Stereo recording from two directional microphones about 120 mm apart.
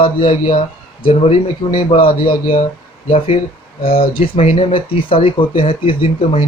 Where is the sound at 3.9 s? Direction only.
50° left (ahead or behind).